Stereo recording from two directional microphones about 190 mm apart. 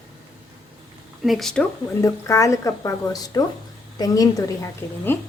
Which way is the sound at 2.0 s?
15° left (ahead or behind).